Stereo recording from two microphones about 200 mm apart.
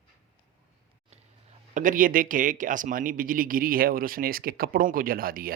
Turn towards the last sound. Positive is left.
turn(degrees=-45)  # may be behind; listen again after turning